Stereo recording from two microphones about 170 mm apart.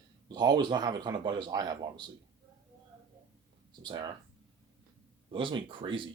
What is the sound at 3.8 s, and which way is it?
Speech, 25° right (ahead or behind).